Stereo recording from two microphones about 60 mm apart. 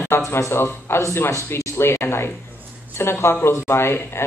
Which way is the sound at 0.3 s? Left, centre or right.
Left.